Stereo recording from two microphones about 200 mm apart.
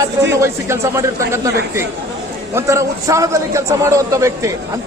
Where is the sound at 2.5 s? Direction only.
15° right (ahead or behind).